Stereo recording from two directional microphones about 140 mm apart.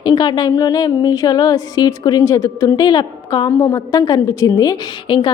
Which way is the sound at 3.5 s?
20° left (ahead or behind).